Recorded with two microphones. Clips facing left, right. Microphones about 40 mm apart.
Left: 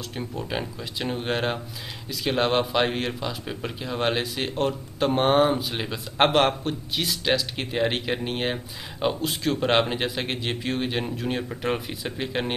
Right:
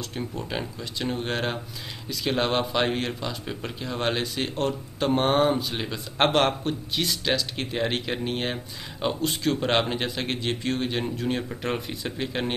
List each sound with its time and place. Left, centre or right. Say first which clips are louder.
0.1 s a man's voice: left 3 dB; centre